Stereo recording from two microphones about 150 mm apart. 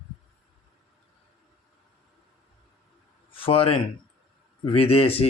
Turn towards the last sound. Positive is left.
turn(degrees=40)  # may be behind; listen again after turning